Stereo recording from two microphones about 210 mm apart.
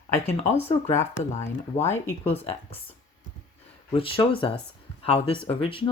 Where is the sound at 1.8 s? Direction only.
10° left (ahead or behind).